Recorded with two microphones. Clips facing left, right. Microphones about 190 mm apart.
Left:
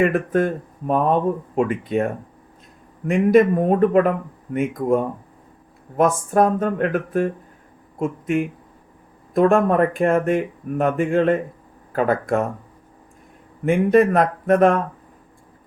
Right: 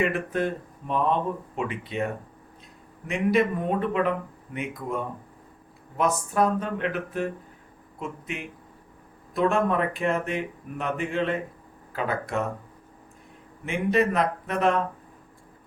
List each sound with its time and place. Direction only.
0.0 s speech: 45° left (ahead or behind)
3.1 s speech: 45° left (ahead or behind)
13.7 s speech: 50° left (ahead or behind)